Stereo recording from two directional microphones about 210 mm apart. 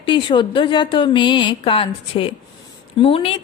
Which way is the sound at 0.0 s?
25° left (ahead or behind).